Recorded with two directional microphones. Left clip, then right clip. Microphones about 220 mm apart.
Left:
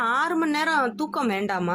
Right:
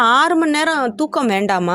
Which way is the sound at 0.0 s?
40° right (ahead or behind).